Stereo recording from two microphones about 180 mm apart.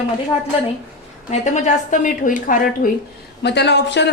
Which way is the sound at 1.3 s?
40° left (ahead or behind).